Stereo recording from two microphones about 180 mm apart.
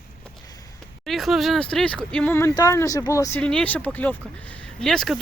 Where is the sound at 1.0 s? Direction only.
Centre (ahead or behind); by 3.4 s 15° left (ahead or behind).